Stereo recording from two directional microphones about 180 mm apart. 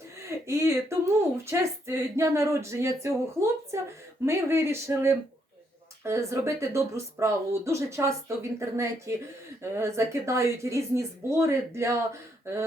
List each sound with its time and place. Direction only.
0.3 s speech: 15° right (ahead or behind)